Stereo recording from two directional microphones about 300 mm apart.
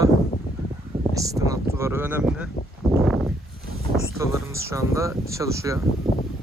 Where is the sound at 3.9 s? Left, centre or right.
Centre.